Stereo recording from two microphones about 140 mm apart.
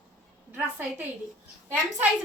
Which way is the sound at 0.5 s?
10° right (ahead or behind).